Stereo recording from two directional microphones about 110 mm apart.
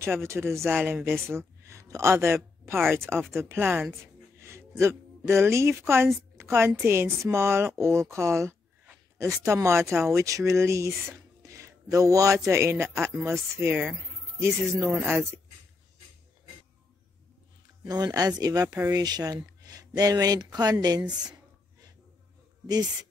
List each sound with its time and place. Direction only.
0.0 s speech: 25° right (ahead or behind)
4.0 s music: 25° right (ahead or behind)
6.7 s speech: 20° right (ahead or behind)
11.4 s a sound: 30° right (ahead or behind)
12.4 s speech: 25° right (ahead or behind)
13.7 s speech: 5° right (ahead or behind)
14.7 s speech: 25° right (ahead or behind)
17.8 s speech: 35° right (ahead or behind)